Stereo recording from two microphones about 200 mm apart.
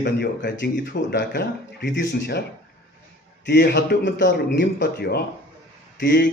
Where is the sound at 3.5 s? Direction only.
60° left (ahead or behind).